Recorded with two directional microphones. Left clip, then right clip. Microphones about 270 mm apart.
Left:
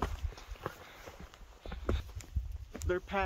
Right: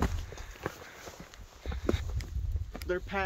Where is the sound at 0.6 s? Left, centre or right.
Right.